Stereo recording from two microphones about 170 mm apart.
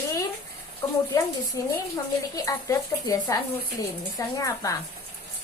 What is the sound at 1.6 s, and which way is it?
Speech, 20° left (ahead or behind).